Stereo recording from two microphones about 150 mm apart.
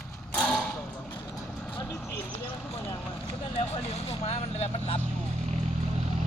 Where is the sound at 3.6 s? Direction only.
45° left (ahead or behind).